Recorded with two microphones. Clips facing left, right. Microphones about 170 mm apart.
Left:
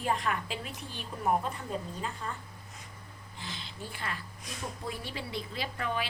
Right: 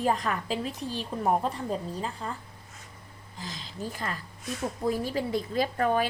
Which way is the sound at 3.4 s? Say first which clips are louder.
Right 5 dB; 40° right (ahead or behind).